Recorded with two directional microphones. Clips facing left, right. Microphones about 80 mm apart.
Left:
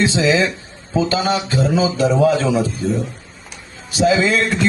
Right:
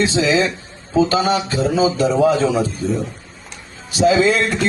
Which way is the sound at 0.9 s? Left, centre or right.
Right.